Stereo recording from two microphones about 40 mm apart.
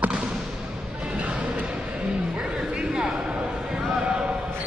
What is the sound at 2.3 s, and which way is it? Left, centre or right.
Vehicle, right.